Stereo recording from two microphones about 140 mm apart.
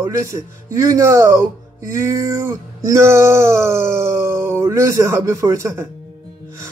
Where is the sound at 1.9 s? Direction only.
20° right (ahead or behind).